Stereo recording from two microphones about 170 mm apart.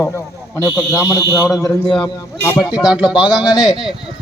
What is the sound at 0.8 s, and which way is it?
Speech, 5° right (ahead or behind).